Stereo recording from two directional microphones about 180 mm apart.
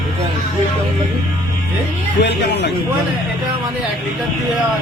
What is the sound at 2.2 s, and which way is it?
Speech, 70° left (ahead or behind).